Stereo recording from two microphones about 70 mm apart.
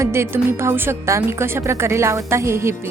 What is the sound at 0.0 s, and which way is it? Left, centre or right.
Speech, right.